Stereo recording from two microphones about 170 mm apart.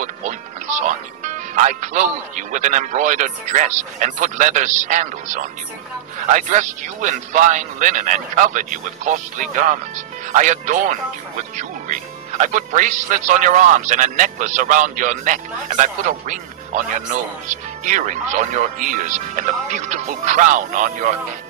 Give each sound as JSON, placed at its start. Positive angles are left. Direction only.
{"t": 0.0, "sound": "speech", "side_deg": -45}